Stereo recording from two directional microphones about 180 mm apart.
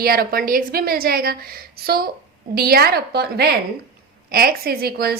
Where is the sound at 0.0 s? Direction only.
55° right (ahead or behind).